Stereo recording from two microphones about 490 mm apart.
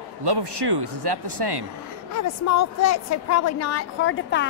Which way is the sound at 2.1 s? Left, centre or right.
Left.